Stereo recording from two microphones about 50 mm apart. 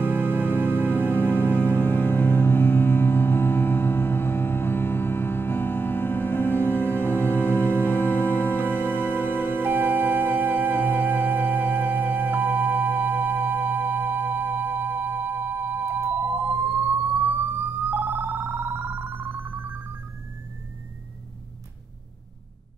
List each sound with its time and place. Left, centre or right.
0.0 s music: left
9.6 s music: right
15.9 s siren: right